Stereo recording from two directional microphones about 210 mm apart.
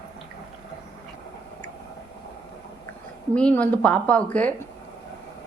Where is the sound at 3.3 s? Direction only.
5° left (ahead or behind).